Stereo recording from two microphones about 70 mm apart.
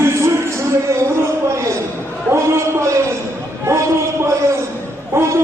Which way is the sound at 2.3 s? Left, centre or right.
Right.